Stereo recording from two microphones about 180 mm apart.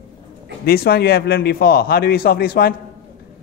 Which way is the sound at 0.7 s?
60° left (ahead or behind).